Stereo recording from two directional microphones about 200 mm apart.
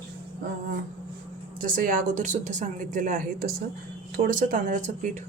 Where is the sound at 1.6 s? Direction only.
45° right (ahead or behind).